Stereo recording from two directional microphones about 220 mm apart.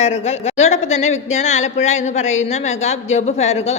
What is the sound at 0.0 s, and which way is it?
A woman's voice, 30° left (ahead or behind).